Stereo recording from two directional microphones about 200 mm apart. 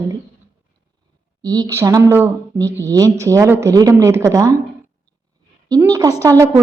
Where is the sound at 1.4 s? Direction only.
20° right (ahead or behind).